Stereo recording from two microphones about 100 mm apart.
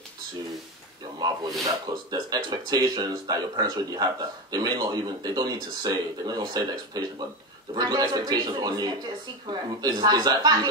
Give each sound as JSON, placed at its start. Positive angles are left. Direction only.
{"t": 1.6, "sound": "speech", "side_deg": -45}